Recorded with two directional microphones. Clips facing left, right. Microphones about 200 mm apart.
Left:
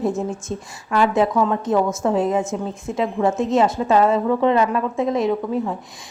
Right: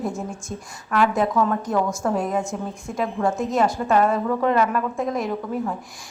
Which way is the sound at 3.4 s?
25° left (ahead or behind).